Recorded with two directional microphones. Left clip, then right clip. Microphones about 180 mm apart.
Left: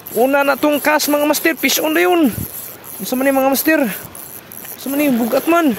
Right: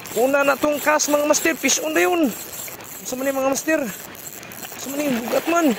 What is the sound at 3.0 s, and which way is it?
Speech, 70° left (ahead or behind).